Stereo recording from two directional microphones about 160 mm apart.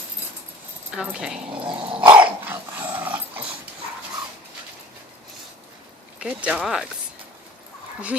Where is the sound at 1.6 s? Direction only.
30° right (ahead or behind).